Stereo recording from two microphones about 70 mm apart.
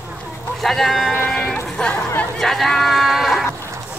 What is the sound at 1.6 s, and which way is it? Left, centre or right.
Music, centre.